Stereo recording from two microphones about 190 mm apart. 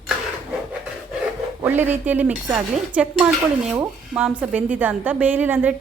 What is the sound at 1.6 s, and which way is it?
Speech, 10° right (ahead or behind).